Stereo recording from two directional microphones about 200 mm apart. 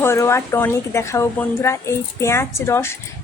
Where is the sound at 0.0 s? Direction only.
15° left (ahead or behind).